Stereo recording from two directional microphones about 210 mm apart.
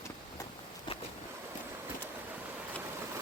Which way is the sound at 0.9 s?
25° left (ahead or behind).